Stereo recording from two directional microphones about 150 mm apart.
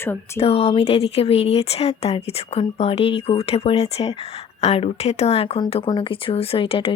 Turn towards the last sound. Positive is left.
turn(degrees=40)  # may be behind; listen again after turning